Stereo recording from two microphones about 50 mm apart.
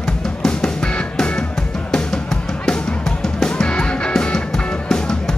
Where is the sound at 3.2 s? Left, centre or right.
Centre.